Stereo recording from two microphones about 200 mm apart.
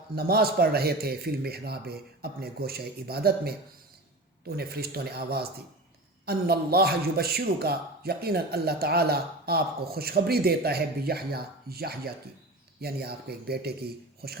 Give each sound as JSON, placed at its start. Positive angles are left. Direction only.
{"t": 0.2, "sound": "a man's voice", "side_deg": -50}